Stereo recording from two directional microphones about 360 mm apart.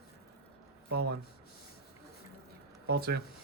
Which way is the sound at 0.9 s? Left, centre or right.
Right.